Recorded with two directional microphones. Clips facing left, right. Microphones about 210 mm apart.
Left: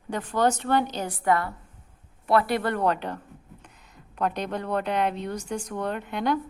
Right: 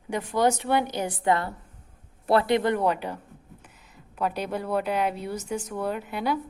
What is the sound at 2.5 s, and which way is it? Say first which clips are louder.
A woman's voice: right 2 dB; 15° right (ahead or behind).